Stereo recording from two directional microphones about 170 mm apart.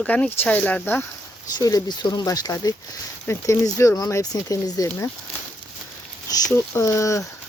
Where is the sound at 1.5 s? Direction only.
25° left (ahead or behind).